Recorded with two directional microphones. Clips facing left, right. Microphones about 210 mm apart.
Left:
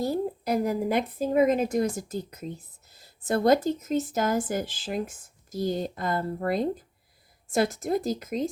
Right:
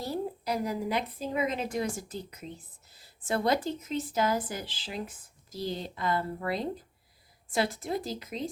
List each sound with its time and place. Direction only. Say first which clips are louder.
0.0 s speech: left 6 dB; 50° left (ahead or behind)